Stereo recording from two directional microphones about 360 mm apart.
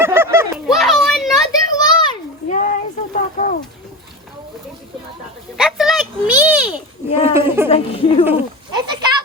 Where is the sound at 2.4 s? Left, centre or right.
Left.